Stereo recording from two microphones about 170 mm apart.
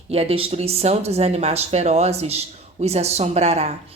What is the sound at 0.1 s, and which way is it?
A woman's voice, 35° right (ahead or behind).